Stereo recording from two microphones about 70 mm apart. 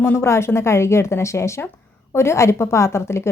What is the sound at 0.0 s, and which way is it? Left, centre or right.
Speech, left.